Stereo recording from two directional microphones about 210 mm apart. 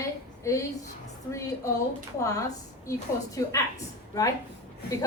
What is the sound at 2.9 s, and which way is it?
Speech, 15° left (ahead or behind).